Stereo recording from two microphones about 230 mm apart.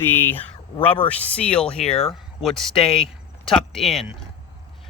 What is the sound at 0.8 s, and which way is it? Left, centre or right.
Speech, left.